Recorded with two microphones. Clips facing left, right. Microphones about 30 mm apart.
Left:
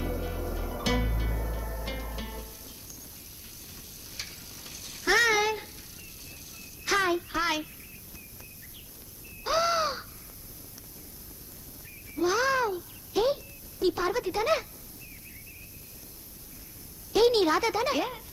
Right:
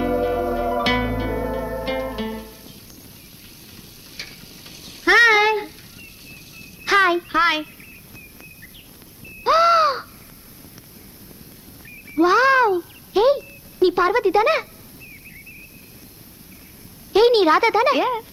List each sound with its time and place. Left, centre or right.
0.0 s music: right
4.2 s stir: right
5.0 s cat: right
6.6 s child singing: right
9.4 s caw: right
12.0 s a sound: right
17.1 s a woman's voice: right